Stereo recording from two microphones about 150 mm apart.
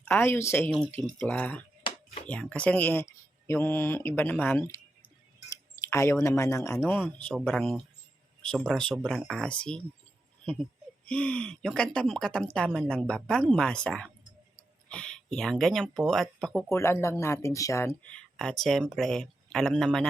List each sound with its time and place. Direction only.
0.0 s speech: 15° left (ahead or behind)
5.8 s speech: 20° left (ahead or behind)
7.3 s speech: centre (ahead or behind)
16.6 s speech: 20° left (ahead or behind)